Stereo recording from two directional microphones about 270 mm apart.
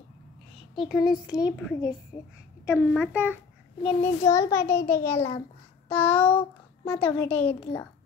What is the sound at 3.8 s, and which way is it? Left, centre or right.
A child's voice, centre.